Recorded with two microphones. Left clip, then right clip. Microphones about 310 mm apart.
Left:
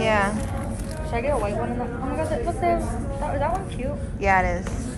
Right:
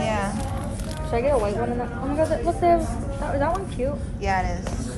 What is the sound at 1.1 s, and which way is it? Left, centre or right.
A woman's voice, right.